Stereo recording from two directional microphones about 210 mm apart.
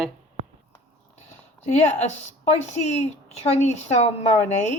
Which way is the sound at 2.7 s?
30° left (ahead or behind).